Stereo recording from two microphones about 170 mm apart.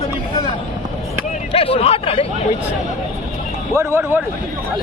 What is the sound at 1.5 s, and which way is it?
Hubbub, 35° left (ahead or behind).